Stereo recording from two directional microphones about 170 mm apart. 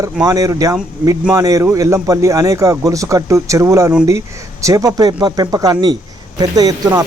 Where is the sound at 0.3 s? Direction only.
20° right (ahead or behind).